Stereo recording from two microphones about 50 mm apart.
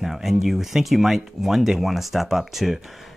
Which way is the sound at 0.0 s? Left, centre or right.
Centre.